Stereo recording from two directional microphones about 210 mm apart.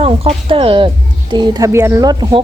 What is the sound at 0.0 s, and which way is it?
Speech, 25° right (ahead or behind).